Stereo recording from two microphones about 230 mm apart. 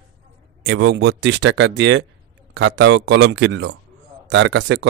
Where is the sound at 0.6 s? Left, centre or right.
Right.